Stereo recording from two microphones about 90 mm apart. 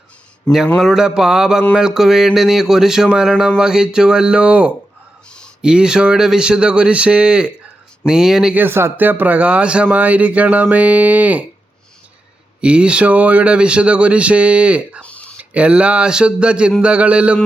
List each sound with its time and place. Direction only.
0.5 s a man's voice: 10° left (ahead or behind)
0.8 s speech: 5° right (ahead or behind)
8.5 s speech: 25° right (ahead or behind)
12.6 s speech: 10° right (ahead or behind)
15.0 s a sound: 15° left (ahead or behind)
15.4 s speech: 15° right (ahead or behind)